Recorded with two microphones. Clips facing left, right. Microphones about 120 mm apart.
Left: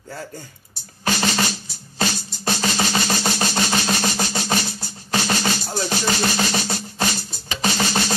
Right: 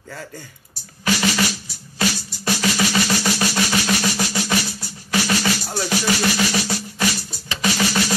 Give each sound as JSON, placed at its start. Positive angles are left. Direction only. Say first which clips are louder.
{"t": 1.0, "sound": "music", "louder": "right 1 dB", "side_deg": 30}